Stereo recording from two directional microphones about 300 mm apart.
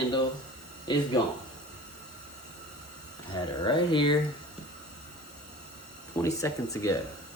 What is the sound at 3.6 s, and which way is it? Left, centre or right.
Speech, centre.